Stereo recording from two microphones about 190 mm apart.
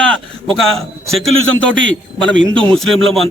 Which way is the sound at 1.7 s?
75° right (ahead or behind).